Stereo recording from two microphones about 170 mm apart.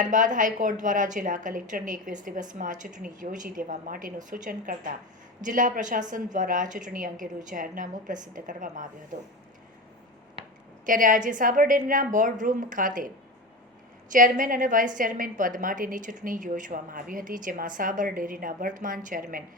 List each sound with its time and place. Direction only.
0.0 s a woman's voice: 50° right (ahead or behind)
10.8 s a woman's voice: 50° right (ahead or behind)
14.1 s a woman's voice: 50° right (ahead or behind)